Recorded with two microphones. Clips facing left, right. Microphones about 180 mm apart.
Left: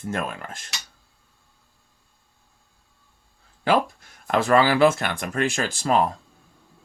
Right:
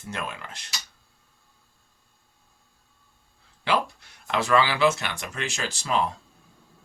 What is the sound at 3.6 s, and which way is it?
Speech, 45° left (ahead or behind).